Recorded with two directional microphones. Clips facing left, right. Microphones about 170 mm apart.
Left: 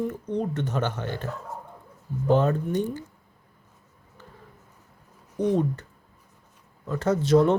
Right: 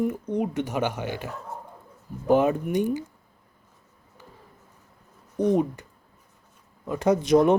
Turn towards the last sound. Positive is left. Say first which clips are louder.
# right 1 dB
turn(degrees=-15)  # may be behind; listen again after turning